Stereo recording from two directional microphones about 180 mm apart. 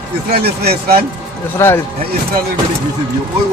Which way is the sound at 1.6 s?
15° left (ahead or behind).